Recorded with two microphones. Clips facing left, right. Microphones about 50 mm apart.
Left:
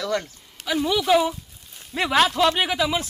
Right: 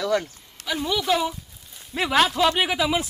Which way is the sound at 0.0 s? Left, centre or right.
Centre.